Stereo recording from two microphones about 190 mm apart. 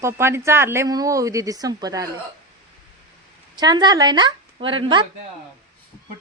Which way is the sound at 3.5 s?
20° right (ahead or behind).